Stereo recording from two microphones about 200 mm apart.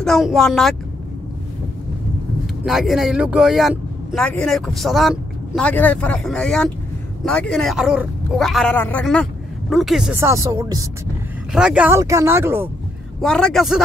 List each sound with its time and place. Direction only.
0.0 s speech: centre (ahead or behind)
2.6 s speech: centre (ahead or behind)
10.2 s speech: 15° right (ahead or behind)
11.5 s speech: 5° right (ahead or behind)
13.2 s speech: 5° left (ahead or behind)